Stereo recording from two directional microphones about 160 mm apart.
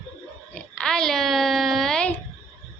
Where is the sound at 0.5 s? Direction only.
5° left (ahead or behind).